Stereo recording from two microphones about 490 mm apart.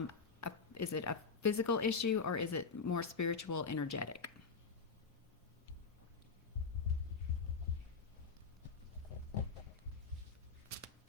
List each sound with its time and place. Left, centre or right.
0.3 s speech: left